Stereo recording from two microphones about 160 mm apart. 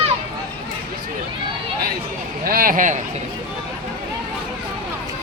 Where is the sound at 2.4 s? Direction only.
65° right (ahead or behind).